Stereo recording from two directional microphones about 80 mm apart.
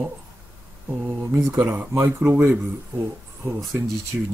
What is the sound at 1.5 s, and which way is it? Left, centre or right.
Speech, right.